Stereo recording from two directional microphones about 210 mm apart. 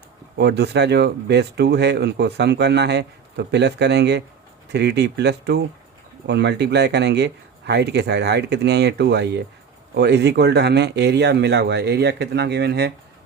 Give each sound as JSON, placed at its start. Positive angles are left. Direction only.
{"t": 0.3, "sound": "speech", "side_deg": -50}